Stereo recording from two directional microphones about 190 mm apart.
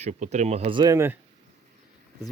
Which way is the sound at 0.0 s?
35° right (ahead or behind).